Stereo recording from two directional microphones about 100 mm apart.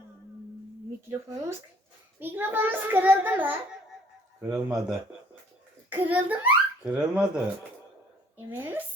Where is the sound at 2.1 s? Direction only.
20° right (ahead or behind).